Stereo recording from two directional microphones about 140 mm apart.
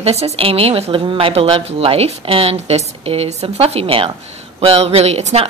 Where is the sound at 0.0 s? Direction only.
45° right (ahead or behind).